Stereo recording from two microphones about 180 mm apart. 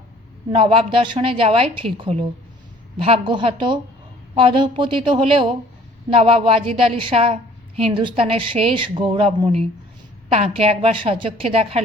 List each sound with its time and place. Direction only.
0.5 s a woman's voice: 30° right (ahead or behind)